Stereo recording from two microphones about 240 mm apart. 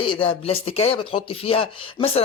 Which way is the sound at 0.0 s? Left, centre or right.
Left.